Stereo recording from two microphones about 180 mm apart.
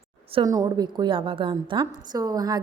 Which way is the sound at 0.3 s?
20° right (ahead or behind).